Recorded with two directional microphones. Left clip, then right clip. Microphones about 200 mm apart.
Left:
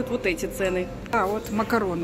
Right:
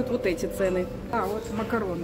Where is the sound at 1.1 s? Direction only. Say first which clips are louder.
Left 5 dB; 65° left (ahead or behind).